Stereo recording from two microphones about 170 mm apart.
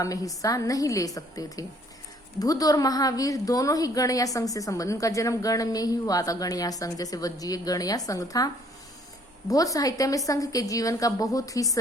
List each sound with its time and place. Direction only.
0.0 s a woman's voice: 20° left (ahead or behind)
9.5 s a woman's voice: 20° left (ahead or behind)